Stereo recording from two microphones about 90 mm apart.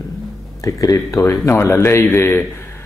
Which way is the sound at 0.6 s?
40° left (ahead or behind).